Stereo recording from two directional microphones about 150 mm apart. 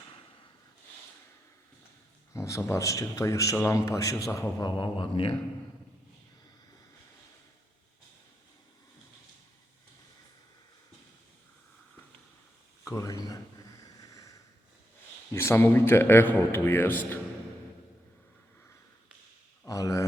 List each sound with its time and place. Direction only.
2.3 s a man's voice: 20° left (ahead or behind)
4.7 s speech: 35° left (ahead or behind)
12.8 s speech: 20° left (ahead or behind)
13.8 s a sound: 25° left (ahead or behind)
15.3 s a man's voice: 15° left (ahead or behind)
19.6 s speech: 20° left (ahead or behind)